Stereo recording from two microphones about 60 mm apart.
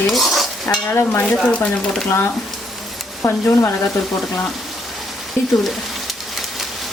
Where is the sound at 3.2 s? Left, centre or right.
Left.